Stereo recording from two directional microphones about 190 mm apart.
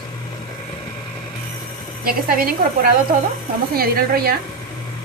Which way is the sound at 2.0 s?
50° right (ahead or behind).